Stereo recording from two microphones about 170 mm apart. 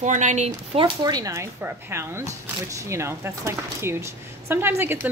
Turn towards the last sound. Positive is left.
turn(degrees=-15)  # may be behind; listen again after turning